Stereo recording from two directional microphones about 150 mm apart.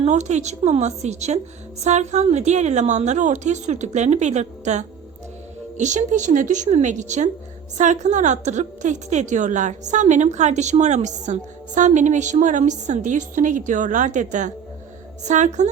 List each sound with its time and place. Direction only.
0.0 s a woman's voice: 50° right (ahead or behind)